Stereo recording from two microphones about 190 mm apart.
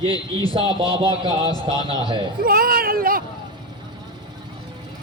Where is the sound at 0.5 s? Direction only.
30° right (ahead or behind).